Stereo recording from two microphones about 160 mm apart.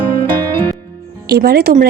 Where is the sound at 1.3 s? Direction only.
75° right (ahead or behind).